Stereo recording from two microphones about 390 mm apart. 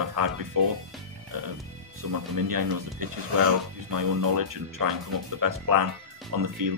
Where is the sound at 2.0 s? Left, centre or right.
Right.